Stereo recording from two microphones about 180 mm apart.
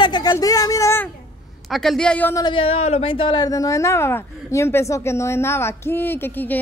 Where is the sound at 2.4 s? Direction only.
30° left (ahead or behind).